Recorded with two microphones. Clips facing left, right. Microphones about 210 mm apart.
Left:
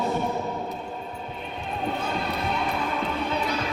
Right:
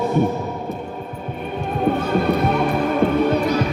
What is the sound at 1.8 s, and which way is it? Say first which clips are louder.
Music: right 11 dB; 55° right (ahead or behind).